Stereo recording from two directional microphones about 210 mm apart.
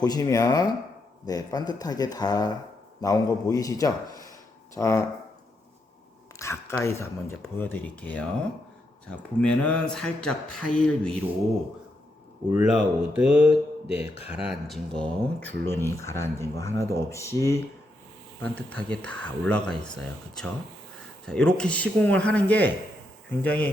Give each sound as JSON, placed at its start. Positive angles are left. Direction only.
{"t": 0.0, "sound": "speech", "side_deg": 15}
{"t": 6.4, "sound": "speech", "side_deg": 10}
{"t": 12.5, "sound": "speech", "side_deg": -5}